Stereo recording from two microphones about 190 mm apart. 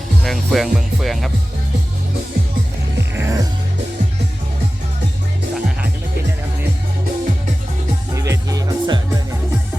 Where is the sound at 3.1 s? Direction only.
15° right (ahead or behind).